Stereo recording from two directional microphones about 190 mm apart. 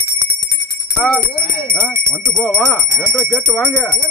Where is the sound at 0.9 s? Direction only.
5° left (ahead or behind).